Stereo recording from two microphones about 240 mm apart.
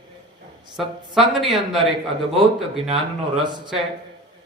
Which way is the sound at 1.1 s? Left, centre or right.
Centre.